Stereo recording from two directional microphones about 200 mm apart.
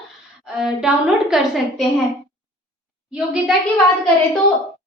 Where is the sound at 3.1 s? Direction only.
5° right (ahead or behind).